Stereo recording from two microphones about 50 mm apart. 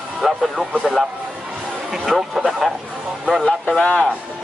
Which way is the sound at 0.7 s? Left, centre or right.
Centre.